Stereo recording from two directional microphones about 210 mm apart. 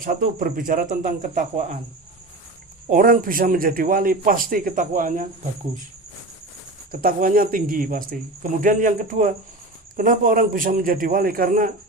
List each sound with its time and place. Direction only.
0.0 s speech: 40° right (ahead or behind)
2.9 s speech: 40° right (ahead or behind)
6.9 s speech: 40° right (ahead or behind)